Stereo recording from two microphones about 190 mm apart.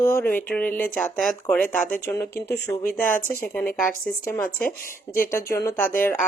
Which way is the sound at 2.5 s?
60° left (ahead or behind).